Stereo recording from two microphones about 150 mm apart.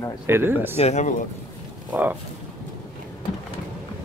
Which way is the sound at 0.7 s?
50° left (ahead or behind).